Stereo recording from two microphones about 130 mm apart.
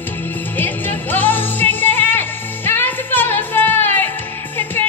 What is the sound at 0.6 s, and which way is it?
Music, 15° left (ahead or behind).